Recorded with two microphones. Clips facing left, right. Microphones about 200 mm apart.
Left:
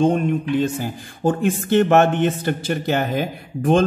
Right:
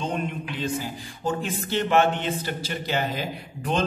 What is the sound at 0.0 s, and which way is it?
Speech, 50° left (ahead or behind).